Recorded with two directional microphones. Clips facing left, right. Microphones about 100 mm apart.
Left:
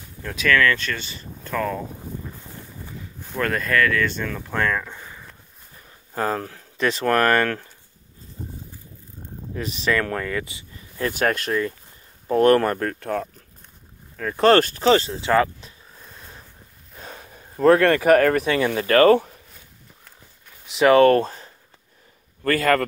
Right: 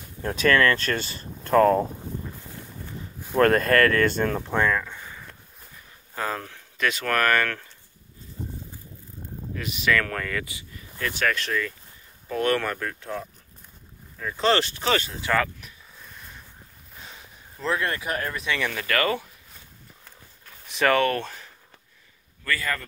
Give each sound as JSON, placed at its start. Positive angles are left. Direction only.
{"t": 0.2, "sound": "speech", "side_deg": -35}
{"t": 3.3, "sound": "speech", "side_deg": -50}
{"t": 4.5, "sound": "speech", "side_deg": -15}
{"t": 4.7, "sound": "a sound", "side_deg": 10}
{"t": 6.1, "sound": "speech", "side_deg": 35}
{"t": 9.6, "sound": "speech", "side_deg": 35}
{"t": 11.1, "sound": "speech", "side_deg": 45}
{"t": 13.0, "sound": "a man's voice", "side_deg": 60}
{"t": 17.0, "sound": "a sound", "side_deg": 50}
{"t": 18.6, "sound": "speech", "side_deg": 30}
{"t": 20.6, "sound": "speech", "side_deg": 20}
{"t": 21.0, "sound": "speech", "side_deg": 35}
{"t": 22.4, "sound": "a man's voice", "side_deg": 55}